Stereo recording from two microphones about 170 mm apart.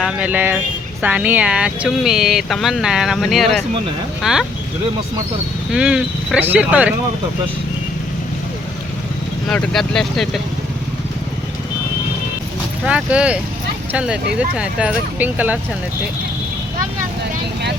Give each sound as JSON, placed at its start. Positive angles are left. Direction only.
{"t": 0.0, "sound": "speech", "side_deg": -10}
{"t": 5.7, "sound": "speech", "side_deg": -5}
{"t": 9.5, "sound": "speech", "side_deg": 5}
{"t": 12.8, "sound": "speech", "side_deg": -5}